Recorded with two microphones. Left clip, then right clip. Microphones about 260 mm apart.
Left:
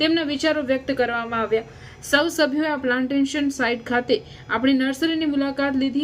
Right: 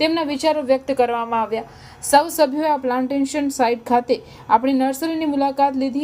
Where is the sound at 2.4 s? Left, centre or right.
Right.